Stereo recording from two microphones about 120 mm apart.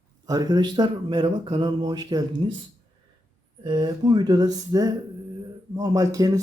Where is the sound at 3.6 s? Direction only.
40° right (ahead or behind).